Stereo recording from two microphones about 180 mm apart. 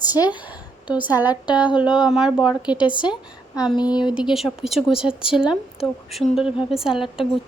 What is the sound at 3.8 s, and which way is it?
Speech, 25° left (ahead or behind).